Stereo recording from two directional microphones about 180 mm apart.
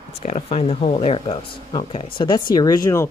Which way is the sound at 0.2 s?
40° left (ahead or behind).